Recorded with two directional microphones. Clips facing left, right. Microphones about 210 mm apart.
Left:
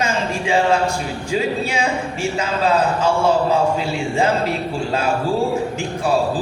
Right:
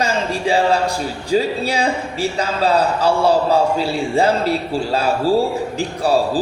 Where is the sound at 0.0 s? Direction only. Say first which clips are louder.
Right 2 dB; 35° right (ahead or behind).